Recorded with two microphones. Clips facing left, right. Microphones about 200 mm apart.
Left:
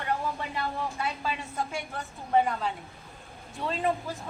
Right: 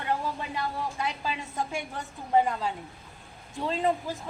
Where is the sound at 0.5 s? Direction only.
20° right (ahead or behind).